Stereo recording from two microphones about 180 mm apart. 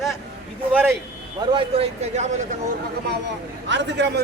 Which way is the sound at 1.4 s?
30° right (ahead or behind).